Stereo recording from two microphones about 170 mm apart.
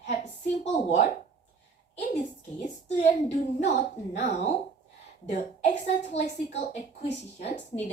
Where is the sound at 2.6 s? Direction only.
40° left (ahead or behind).